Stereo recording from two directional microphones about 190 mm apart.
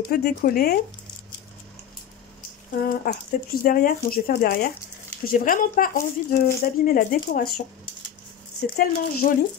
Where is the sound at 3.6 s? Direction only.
50° left (ahead or behind).